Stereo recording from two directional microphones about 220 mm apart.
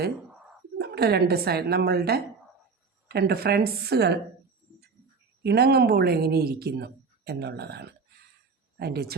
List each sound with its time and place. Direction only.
0.8 s speech: 45° right (ahead or behind)
5.4 s speech: 50° right (ahead or behind)